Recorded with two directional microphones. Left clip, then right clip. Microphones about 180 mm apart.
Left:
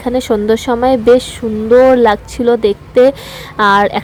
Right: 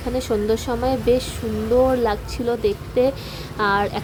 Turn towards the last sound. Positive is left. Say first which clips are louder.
# left 10 dB
turn(degrees=30)  # may be behind; listen again after turning